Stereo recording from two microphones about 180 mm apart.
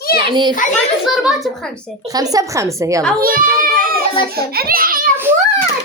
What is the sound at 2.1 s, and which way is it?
Speech, 20° right (ahead or behind).